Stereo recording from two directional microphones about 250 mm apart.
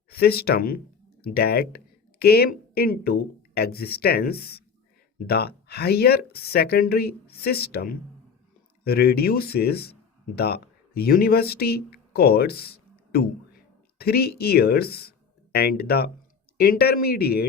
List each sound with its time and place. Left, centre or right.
0.1 s speech: left